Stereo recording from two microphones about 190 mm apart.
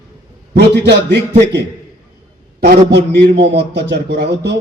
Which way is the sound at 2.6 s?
60° right (ahead or behind).